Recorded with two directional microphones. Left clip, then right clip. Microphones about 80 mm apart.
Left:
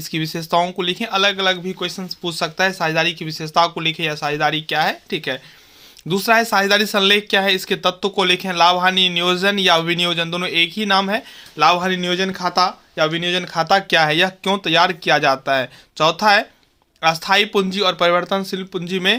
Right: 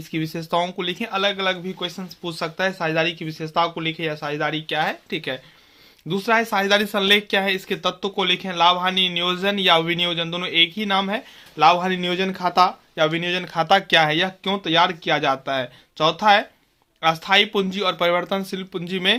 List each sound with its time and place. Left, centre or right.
0.1 s speech: left
8.1 s speech: left
11.5 s speech: centre
11.9 s speech: centre; by 14.2 s left
14.2 s speech: left; by 19.1 s centre